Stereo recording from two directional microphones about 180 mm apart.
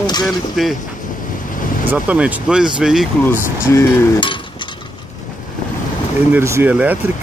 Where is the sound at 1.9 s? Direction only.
5° right (ahead or behind).